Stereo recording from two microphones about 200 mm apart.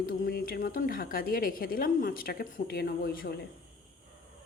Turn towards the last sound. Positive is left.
turn(degrees=45)  # may be behind; listen again after turning